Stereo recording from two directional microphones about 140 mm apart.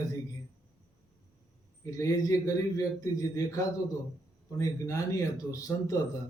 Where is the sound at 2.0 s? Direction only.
25° left (ahead or behind).